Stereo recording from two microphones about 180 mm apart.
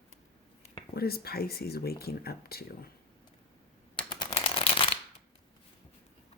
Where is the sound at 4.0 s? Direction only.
25° left (ahead or behind).